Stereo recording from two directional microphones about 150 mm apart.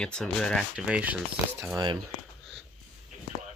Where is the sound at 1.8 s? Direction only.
25° right (ahead or behind).